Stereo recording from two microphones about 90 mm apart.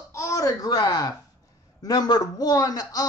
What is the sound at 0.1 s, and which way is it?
A man's voice, 35° left (ahead or behind).